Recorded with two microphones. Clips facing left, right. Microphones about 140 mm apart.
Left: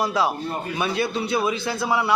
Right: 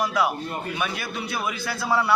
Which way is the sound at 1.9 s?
15° left (ahead or behind).